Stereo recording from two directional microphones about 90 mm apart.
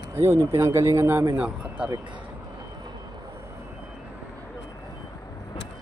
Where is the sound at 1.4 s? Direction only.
10° right (ahead or behind).